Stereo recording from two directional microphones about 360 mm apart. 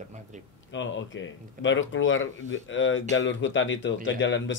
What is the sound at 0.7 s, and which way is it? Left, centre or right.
Speech, left.